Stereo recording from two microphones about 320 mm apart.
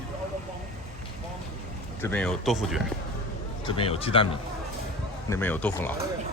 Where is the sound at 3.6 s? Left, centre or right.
Centre.